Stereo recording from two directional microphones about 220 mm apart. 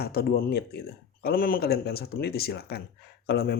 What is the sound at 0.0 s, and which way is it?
Speech, 45° left (ahead or behind).